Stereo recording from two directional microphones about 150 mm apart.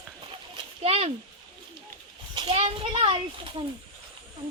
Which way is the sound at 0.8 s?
40° right (ahead or behind).